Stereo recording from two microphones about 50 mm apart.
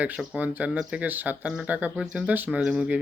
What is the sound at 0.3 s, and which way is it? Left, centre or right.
Speech, right.